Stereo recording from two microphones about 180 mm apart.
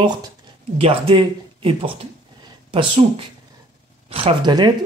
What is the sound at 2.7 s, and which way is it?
Speech, 30° right (ahead or behind).